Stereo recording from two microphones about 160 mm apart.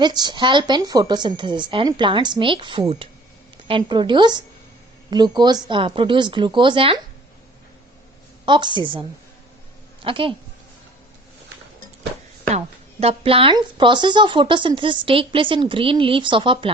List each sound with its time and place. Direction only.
0.0 s a woman's voice: 25° right (ahead or behind)
8.4 s a woman's voice: 30° right (ahead or behind)
12.5 s speech: 40° right (ahead or behind)